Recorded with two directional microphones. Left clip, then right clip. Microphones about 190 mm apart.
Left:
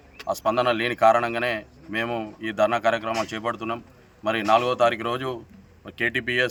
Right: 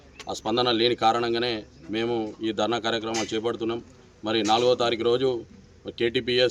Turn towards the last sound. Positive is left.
turn(degrees=0)  # may be behind; listen again after turning